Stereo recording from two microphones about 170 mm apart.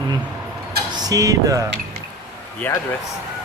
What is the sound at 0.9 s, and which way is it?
Speech, 20° right (ahead or behind).